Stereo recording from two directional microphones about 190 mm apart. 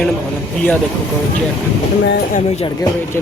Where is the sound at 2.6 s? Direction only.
20° left (ahead or behind).